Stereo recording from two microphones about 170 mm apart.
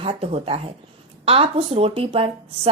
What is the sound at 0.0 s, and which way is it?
Speech, 35° right (ahead or behind).